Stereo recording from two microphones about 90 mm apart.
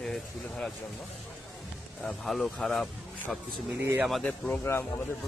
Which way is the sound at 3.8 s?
30° right (ahead or behind).